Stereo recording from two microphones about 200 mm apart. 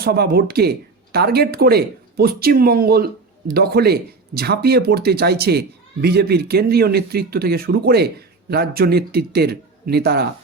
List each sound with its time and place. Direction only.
0.0 s speech: 50° right (ahead or behind)